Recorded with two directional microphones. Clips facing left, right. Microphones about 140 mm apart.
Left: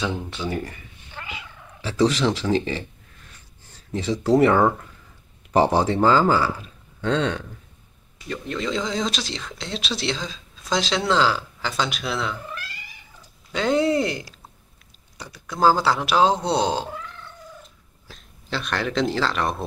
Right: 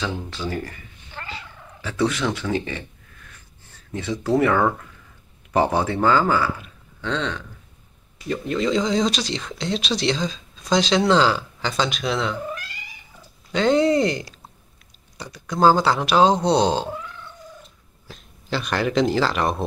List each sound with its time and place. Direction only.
0.4 s speech: 25° left (ahead or behind)
1.1 s cat: 10° left (ahead or behind)
1.9 s speech: 30° left (ahead or behind)
3.9 s speech: 35° left (ahead or behind)
8.3 s speech: 5° right (ahead or behind)
13.5 s speech: 5° left (ahead or behind)
18.0 s speech: centre (ahead or behind)